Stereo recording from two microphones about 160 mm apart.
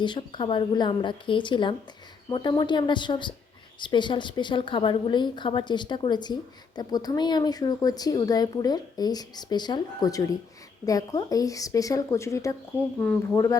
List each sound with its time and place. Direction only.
0.0 s speech: 30° left (ahead or behind)